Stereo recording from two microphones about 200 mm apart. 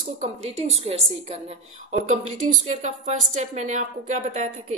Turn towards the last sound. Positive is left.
turn(degrees=-40)  # may be behind; listen again after turning